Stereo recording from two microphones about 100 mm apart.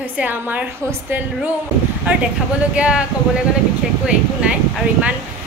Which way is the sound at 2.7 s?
10° right (ahead or behind).